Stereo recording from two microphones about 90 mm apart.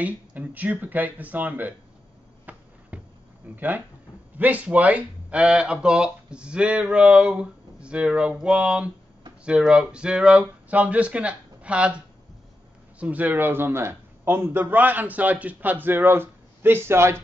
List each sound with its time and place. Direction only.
0.0 s a man's voice: 15° right (ahead or behind)
2.5 s a sound: 15° right (ahead or behind)
3.5 s a man's voice: 20° right (ahead or behind)
13.0 s a man's voice: 20° right (ahead or behind)